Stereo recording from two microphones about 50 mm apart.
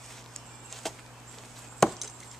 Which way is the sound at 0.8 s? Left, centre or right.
Centre.